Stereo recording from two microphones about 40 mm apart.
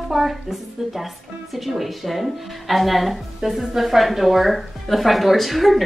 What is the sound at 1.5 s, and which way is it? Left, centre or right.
A woman's voice, centre.